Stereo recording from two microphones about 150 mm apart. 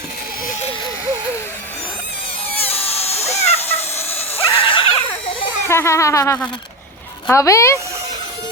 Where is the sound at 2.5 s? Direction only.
40° left (ahead or behind).